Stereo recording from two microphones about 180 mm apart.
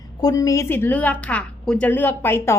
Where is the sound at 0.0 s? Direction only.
20° left (ahead or behind).